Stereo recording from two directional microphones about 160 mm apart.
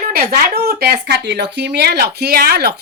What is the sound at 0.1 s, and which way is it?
Speech, 75° right (ahead or behind).